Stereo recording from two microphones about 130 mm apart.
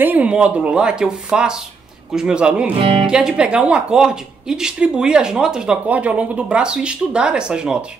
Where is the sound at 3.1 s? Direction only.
5° right (ahead or behind).